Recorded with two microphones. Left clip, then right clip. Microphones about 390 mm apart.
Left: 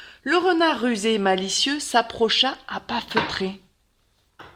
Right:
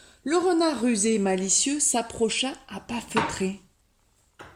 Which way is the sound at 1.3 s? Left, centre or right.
Centre.